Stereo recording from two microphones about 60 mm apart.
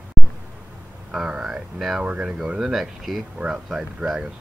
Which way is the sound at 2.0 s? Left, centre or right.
Centre.